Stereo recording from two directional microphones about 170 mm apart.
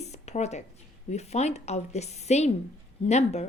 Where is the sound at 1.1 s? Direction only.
40° left (ahead or behind).